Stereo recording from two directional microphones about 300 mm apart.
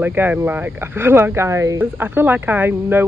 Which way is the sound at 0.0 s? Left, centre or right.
Centre.